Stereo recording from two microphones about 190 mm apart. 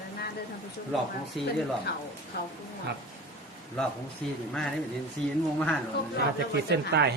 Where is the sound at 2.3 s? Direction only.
60° left (ahead or behind).